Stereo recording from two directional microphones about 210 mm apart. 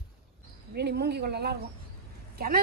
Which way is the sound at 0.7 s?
50° right (ahead or behind).